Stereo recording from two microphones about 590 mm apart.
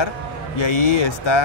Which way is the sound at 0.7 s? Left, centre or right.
Left.